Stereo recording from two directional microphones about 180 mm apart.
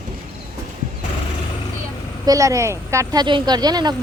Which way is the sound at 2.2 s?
20° right (ahead or behind).